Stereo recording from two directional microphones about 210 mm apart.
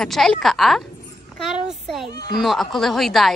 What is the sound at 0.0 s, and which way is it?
A woman's voice, centre (ahead or behind).